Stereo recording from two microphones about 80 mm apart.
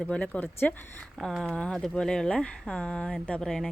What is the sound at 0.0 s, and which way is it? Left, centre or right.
Speech, centre.